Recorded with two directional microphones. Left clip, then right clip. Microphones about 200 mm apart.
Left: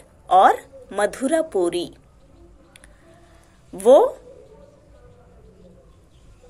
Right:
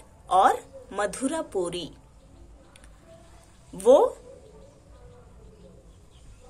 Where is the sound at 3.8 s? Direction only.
25° left (ahead or behind).